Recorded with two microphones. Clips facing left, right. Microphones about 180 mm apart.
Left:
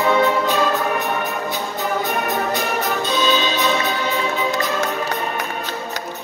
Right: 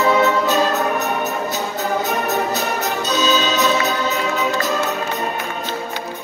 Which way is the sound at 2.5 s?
40° right (ahead or behind).